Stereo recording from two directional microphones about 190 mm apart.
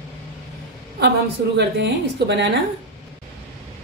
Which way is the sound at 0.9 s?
65° right (ahead or behind).